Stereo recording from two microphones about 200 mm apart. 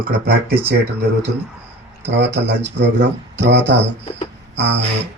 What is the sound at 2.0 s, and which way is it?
Speech, 60° right (ahead or behind).